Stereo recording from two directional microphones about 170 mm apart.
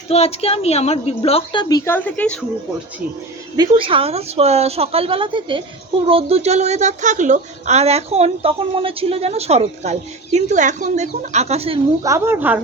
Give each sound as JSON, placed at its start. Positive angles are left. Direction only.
{"t": 0.1, "sound": "a woman's voice", "side_deg": 35}
{"t": 1.6, "sound": "a woman's voice", "side_deg": 20}
{"t": 3.6, "sound": "a woman's voice", "side_deg": -30}
{"t": 12.0, "sound": "speech", "side_deg": -15}